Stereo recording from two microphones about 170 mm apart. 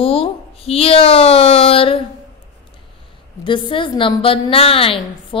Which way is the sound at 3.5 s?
30° left (ahead or behind).